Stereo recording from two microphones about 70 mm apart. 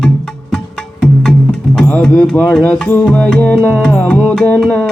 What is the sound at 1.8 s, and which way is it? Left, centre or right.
Music, centre.